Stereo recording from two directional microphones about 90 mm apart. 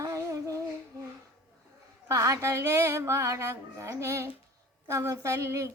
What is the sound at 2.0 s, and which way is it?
Child singing, 35° right (ahead or behind).